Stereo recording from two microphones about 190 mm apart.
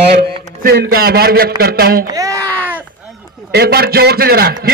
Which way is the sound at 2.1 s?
20° right (ahead or behind).